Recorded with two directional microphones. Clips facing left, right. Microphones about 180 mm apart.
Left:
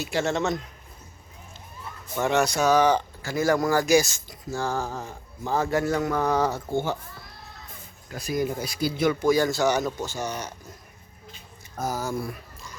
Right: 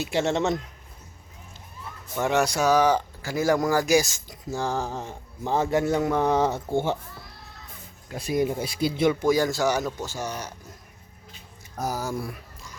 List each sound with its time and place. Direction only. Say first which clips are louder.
0.0 s speech: right 1 dB; 25° right (ahead or behind)
2.1 s speech: even; 10° right (ahead or behind); by 7.0 s 25° right (ahead or behind)
8.1 s speech: right 2 dB; 25° right (ahead or behind); by 10.5 s 5° right (ahead or behind)
11.9 s speech: even; 10° right (ahead or behind)